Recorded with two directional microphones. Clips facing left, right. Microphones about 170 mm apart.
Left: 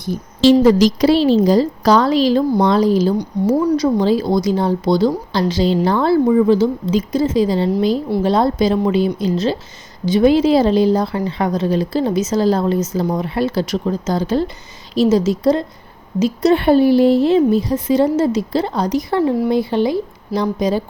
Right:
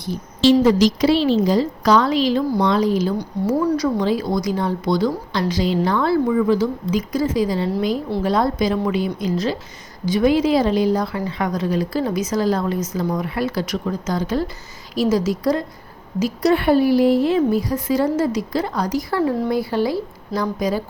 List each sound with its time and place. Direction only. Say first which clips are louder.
0.1 s a woman's voice: left 3 dB; 35° left (ahead or behind)
3.2 s a woman's voice: left 4 dB; 20° left (ahead or behind)